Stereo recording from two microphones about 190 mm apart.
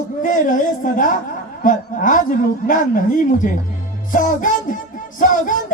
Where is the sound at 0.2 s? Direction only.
45° left (ahead or behind).